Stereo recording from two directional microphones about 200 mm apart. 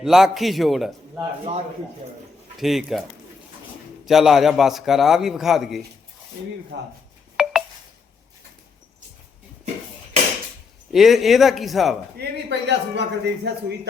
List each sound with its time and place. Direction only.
0.0 s a man's voice: centre (ahead or behind)
2.6 s a man's voice: centre (ahead or behind)
4.0 s a man's voice: centre (ahead or behind)
6.7 s a man's voice: 60° right (ahead or behind)
7.4 s telephone dialing: 5° right (ahead or behind)
10.9 s a man's voice: centre (ahead or behind)
12.1 s a man's voice: 60° right (ahead or behind)